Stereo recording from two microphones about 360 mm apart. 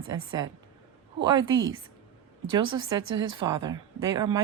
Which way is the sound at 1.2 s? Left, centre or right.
Centre.